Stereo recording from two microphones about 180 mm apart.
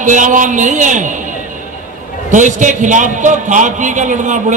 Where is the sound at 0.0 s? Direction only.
45° right (ahead or behind).